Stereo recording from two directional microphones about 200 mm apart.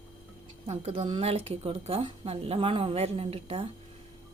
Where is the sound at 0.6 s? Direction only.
30° right (ahead or behind).